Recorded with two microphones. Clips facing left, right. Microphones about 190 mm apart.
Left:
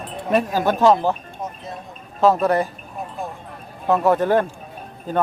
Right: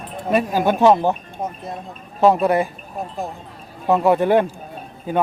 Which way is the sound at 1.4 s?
55° right (ahead or behind).